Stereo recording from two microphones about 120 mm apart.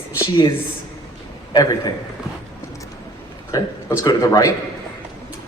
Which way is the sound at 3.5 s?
30° left (ahead or behind).